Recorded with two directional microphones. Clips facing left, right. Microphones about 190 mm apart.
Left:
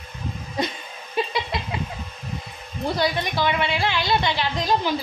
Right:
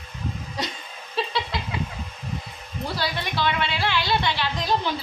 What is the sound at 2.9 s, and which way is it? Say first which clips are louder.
A woman's voice: left 6 dB; 15° left (ahead or behind).